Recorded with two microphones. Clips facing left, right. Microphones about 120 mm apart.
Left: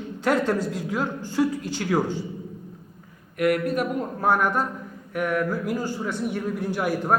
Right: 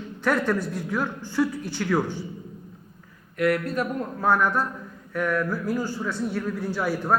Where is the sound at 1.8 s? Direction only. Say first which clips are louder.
Right 1 dB; 40° left (ahead or behind).